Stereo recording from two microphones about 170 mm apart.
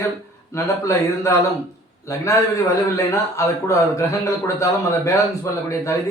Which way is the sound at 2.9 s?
15° left (ahead or behind).